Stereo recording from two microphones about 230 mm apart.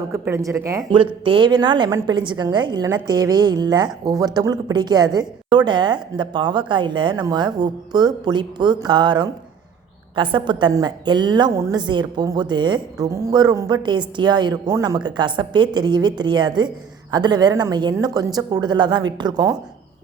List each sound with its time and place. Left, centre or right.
0.1 s a woman's voice: centre